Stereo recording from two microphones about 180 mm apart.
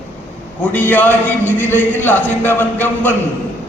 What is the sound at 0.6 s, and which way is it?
A man's voice, 10° left (ahead or behind).